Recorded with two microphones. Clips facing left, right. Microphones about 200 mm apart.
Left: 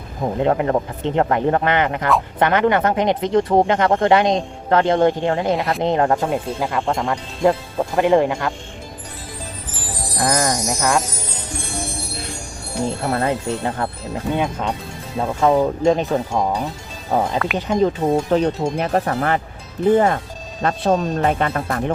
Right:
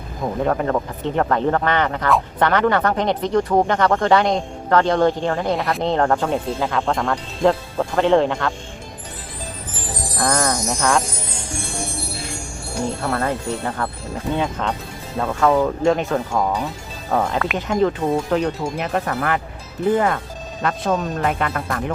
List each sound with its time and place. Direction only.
0.2 s speech: 20° left (ahead or behind)
5.5 s speech: centre (ahead or behind)
5.8 s speech: 15° left (ahead or behind)
10.2 s speech: 15° left (ahead or behind)
12.8 s speech: 20° left (ahead or behind)
14.3 s speech: 10° left (ahead or behind); by 21.9 s 30° left (ahead or behind)